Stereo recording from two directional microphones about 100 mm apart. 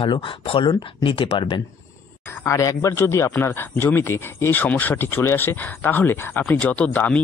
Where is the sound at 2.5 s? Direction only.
35° left (ahead or behind).